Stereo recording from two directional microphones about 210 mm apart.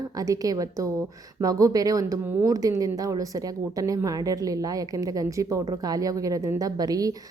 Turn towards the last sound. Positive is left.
turn(degrees=-15)  # may be behind; listen again after turning